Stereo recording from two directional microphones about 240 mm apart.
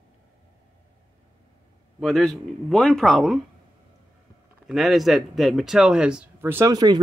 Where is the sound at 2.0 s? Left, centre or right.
Centre.